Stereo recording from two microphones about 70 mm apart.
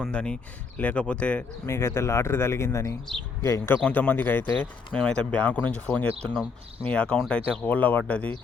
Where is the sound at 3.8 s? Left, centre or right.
Left.